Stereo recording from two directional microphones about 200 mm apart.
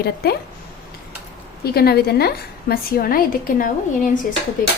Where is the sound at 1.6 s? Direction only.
50° left (ahead or behind).